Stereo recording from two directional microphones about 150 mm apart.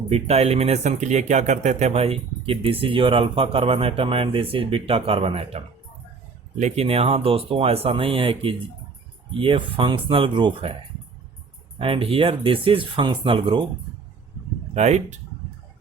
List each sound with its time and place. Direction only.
0.1 s speech: 45° right (ahead or behind)
11.8 s speech: 40° right (ahead or behind)
14.7 s speech: 50° right (ahead or behind)